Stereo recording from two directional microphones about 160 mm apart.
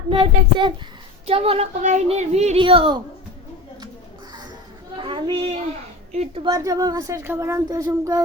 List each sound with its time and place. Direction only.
0.1 s speech: 35° right (ahead or behind)
4.9 s a sound: 30° right (ahead or behind)
6.1 s a woman's voice: 45° right (ahead or behind)
6.4 s a woman's voice: 25° right (ahead or behind)